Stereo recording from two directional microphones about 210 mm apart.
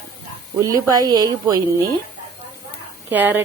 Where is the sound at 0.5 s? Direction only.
15° right (ahead or behind).